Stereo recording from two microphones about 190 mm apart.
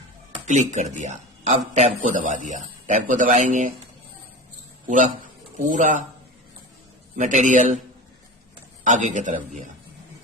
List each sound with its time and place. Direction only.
0.4 s speech: 40° right (ahead or behind)
5.5 s speech: 40° right (ahead or behind)
7.2 s speech: 40° right (ahead or behind)
8.8 s speech: 40° right (ahead or behind)